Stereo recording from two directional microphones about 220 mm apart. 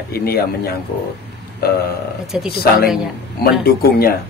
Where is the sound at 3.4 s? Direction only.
45° left (ahead or behind).